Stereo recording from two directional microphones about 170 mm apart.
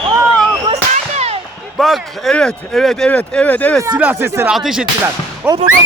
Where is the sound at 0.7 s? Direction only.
40° right (ahead or behind).